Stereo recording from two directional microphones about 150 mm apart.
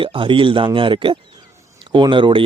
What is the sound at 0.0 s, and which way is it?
Speech, 35° right (ahead or behind).